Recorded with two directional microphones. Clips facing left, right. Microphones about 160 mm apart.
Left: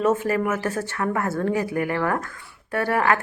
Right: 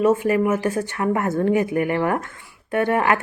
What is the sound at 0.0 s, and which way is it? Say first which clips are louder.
Speech: right 4 dB; 15° right (ahead or behind).